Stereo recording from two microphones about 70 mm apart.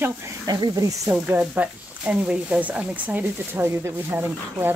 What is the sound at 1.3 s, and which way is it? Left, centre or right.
Speech, right.